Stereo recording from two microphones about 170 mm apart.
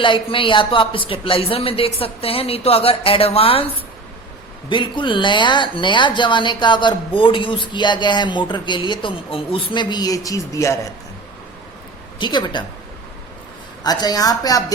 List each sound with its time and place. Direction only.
0.0 s speech: 30° left (ahead or behind)
4.7 s speech: 30° left (ahead or behind)
12.2 s speech: 25° left (ahead or behind)
13.8 s speech: 25° left (ahead or behind)